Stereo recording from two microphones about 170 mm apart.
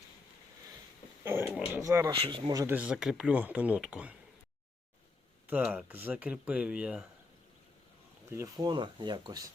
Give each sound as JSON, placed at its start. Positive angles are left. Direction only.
{"t": 1.2, "sound": "speech", "side_deg": -15}
{"t": 2.1, "sound": "speech", "side_deg": -30}
{"t": 2.5, "sound": "speech", "side_deg": -20}
{"t": 2.7, "sound": "speech", "side_deg": -5}
{"t": 5.5, "sound": "speech", "side_deg": -10}
{"t": 8.3, "sound": "speech", "side_deg": -20}